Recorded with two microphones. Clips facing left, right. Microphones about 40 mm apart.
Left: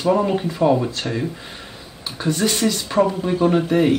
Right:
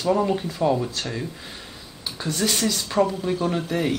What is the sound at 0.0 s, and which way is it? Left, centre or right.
Speech, centre.